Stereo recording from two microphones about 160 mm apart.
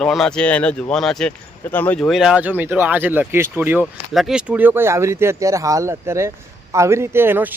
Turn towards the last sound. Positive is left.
turn(degrees=-15)  # may be behind; listen again after turning